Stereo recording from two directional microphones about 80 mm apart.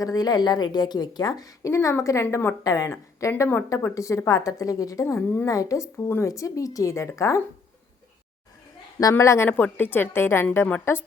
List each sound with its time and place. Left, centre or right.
0.0 s a woman's voice: left
2.3 s a woman's voice: left
2.6 s a woman's voice: left
9.1 s speech: left
9.7 s a woman's voice: left